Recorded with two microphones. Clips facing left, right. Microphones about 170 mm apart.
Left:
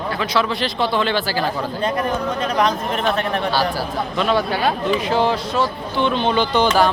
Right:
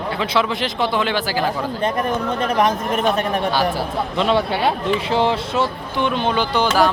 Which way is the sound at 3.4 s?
20° right (ahead or behind).